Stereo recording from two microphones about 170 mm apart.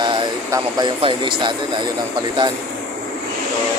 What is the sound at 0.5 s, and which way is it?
Speech, 25° right (ahead or behind).